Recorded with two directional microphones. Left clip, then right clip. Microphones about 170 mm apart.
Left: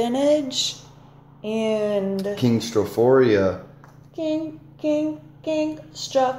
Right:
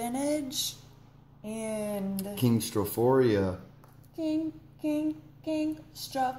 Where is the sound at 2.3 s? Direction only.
10° right (ahead or behind).